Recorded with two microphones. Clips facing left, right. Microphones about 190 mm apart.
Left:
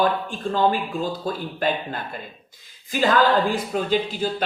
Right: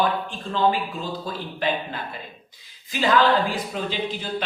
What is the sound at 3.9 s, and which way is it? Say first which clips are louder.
Speech: left 5 dB; 45° left (ahead or behind).